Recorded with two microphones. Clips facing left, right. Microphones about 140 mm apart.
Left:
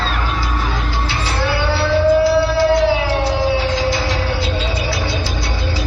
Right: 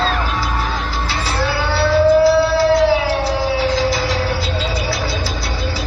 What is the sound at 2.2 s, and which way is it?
Music, 35° right (ahead or behind).